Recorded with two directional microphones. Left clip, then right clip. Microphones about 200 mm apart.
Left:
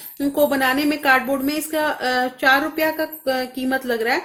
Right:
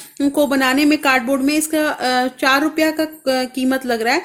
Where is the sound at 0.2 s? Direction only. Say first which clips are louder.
Right 2 dB; 35° right (ahead or behind).